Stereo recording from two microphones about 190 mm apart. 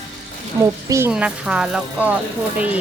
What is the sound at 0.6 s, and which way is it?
Speech, 15° right (ahead or behind).